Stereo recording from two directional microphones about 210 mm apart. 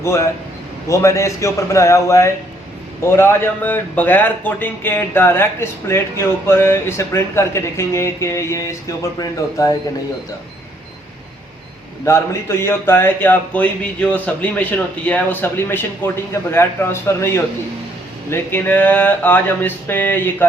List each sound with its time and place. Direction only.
0.0 s a man's voice: 15° left (ahead or behind)
12.0 s a man's voice: 10° left (ahead or behind)